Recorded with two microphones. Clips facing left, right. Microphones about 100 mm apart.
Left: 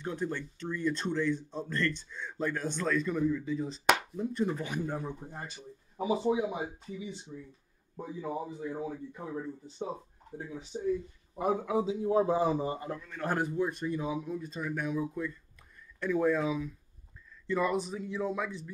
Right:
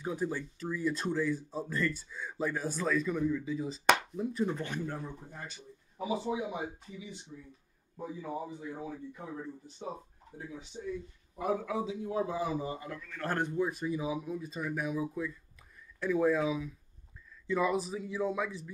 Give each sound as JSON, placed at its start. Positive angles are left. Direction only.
{"t": 0.0, "sound": "speech", "side_deg": -5}
{"t": 7.9, "sound": "speech", "side_deg": 25}
{"t": 10.3, "sound": "a man's voice", "side_deg": 35}
{"t": 13.1, "sound": "a man's voice", "side_deg": 15}
{"t": 13.4, "sound": "speech", "side_deg": 0}